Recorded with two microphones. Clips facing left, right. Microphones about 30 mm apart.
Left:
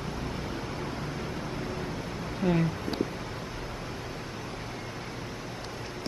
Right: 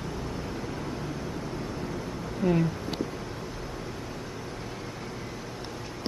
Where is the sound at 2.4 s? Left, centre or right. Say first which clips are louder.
Right 2 dB; left.